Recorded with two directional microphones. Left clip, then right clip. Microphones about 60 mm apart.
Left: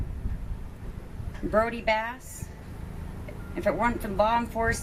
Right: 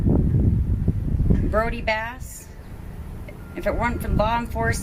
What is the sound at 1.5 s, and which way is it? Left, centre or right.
Speech, right.